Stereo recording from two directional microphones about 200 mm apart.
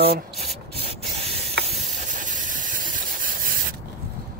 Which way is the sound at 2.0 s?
40° right (ahead or behind).